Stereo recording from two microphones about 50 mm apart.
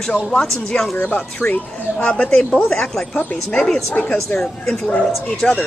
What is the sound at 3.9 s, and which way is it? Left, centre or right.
Speech, left.